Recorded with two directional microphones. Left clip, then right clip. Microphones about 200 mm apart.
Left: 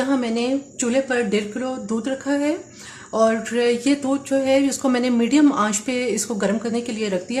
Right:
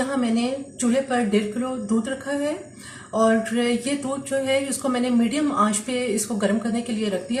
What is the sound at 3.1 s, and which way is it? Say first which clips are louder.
Speech: left 2 dB; 50° left (ahead or behind).